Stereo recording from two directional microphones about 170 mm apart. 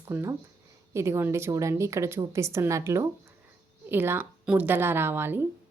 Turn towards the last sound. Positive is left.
turn(degrees=-15)  # may be behind; listen again after turning